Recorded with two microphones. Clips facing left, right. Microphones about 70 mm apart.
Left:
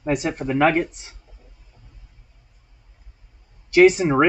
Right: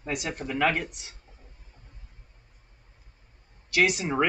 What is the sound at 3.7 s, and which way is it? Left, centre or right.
Speech, left.